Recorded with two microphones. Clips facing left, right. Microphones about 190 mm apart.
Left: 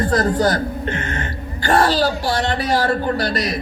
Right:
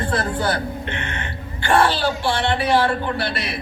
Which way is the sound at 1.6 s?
40° left (ahead or behind).